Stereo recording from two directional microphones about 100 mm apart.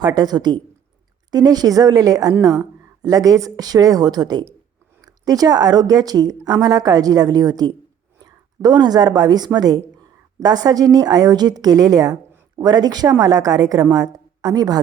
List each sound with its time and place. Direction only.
0.0 s a woman's voice: 40° right (ahead or behind)